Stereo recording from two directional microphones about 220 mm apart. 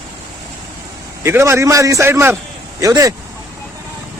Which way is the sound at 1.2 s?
10° right (ahead or behind).